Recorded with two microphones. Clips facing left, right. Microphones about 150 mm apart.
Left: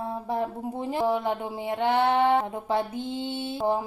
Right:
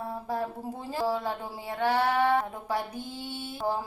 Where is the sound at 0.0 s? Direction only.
20° left (ahead or behind).